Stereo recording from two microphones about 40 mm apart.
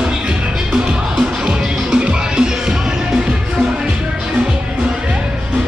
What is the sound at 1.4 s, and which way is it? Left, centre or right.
Music, right.